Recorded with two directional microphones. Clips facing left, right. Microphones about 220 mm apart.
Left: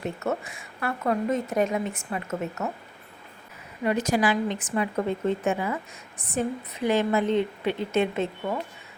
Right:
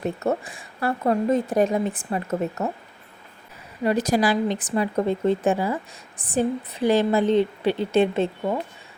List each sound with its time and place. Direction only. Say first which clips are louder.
0.0 s speech: right 4 dB; 35° right (ahead or behind)
3.8 s speech: right 3 dB; 35° right (ahead or behind)